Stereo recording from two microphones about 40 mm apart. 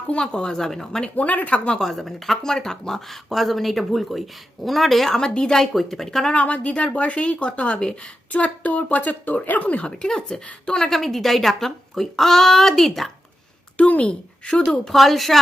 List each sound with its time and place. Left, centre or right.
0.1 s a woman's voice: left
1.1 s speech: left
1.8 s a woman's voice: centre
5.7 s a woman's voice: centre
6.3 s speech: left
8.3 s speech: left
9.8 s a woman's voice: left
10.9 s speech: centre
13.7 s speech: left
14.8 s speech: centre